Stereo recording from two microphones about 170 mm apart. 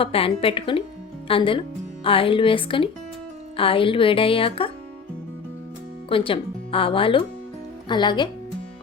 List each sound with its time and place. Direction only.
0.0 s speech: 35° left (ahead or behind)
6.1 s a woman's voice: 30° left (ahead or behind)